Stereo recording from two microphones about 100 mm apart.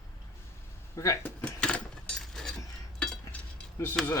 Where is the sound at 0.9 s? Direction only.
30° left (ahead or behind).